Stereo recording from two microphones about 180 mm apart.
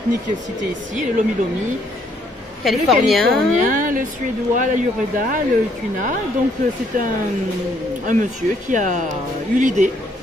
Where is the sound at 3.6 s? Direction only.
50° right (ahead or behind).